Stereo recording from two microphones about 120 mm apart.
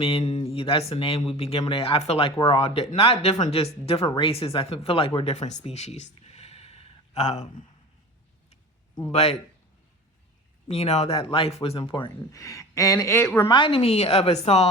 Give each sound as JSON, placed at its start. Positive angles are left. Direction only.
{"t": 0.0, "sound": "speech", "side_deg": 50}
{"t": 9.1, "sound": "speech", "side_deg": 60}
{"t": 10.7, "sound": "speech", "side_deg": 60}
{"t": 12.3, "sound": "speech", "side_deg": 25}
{"t": 13.5, "sound": "speech", "side_deg": 45}